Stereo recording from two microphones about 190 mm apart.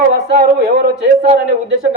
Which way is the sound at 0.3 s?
55° right (ahead or behind).